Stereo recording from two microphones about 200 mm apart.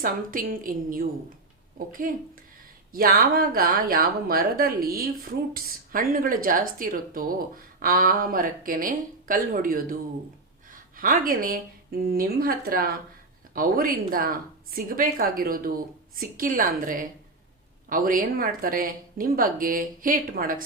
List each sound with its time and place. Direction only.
0.0 s a woman's voice: 45° right (ahead or behind)